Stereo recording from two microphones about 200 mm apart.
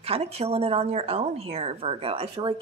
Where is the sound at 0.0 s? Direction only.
30° right (ahead or behind).